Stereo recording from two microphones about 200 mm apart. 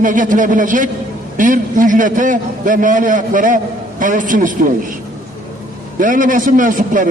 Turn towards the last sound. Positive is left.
turn(degrees=-40)  # may be behind; listen again after turning